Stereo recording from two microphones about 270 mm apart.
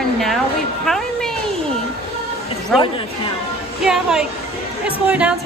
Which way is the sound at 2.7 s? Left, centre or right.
Centre.